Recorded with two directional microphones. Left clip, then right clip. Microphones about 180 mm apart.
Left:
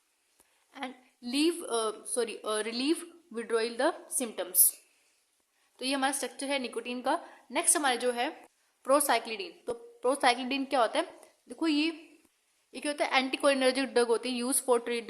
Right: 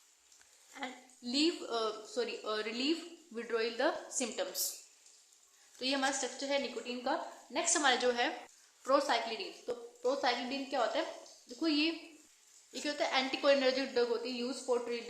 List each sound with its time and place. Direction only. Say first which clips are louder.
0.7 s a woman's voice: left 3 dB; 45° left (ahead or behind)
5.7 s a woman's voice: left 3 dB; 45° left (ahead or behind)
8.8 s a woman's voice: left 4 dB; 50° left (ahead or behind)